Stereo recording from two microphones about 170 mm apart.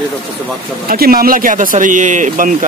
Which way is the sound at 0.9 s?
60° right (ahead or behind).